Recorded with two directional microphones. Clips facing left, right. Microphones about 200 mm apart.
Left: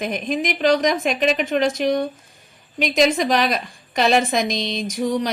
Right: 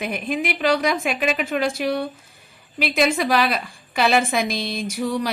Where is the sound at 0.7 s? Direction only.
10° right (ahead or behind).